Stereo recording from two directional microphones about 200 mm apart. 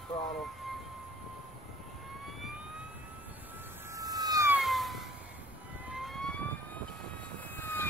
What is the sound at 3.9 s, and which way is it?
Emergency vehicle, 20° right (ahead or behind).